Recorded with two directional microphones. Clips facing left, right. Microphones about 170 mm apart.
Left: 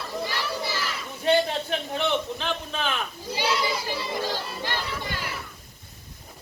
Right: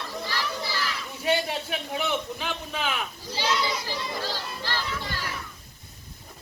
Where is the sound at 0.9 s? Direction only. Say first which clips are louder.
Left 3 dB; 10° right (ahead or behind).